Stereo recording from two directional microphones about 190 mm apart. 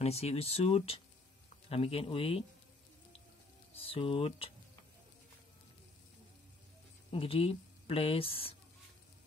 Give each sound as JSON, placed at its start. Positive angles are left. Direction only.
{"t": 0.0, "sound": "speech", "side_deg": 35}
{"t": 3.7, "sound": "speech", "side_deg": 30}
{"t": 7.1, "sound": "a woman's voice", "side_deg": 30}